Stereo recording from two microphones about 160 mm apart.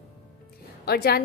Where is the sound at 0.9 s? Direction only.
75° left (ahead or behind).